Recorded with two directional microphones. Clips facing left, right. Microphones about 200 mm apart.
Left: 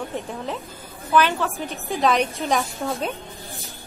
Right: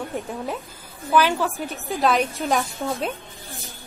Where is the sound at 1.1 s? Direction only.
10° right (ahead or behind).